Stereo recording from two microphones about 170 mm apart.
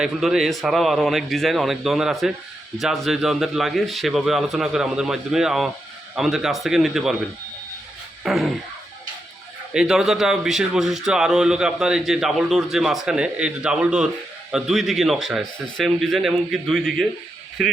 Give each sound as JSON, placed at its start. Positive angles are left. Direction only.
{"t": 0.0, "sound": "a man's voice", "side_deg": 0}
{"t": 8.2, "sound": "a man's voice", "side_deg": 0}
{"t": 9.7, "sound": "a man's voice", "side_deg": -5}